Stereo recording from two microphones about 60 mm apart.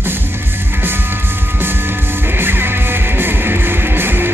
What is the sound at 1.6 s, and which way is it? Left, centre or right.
Music, right.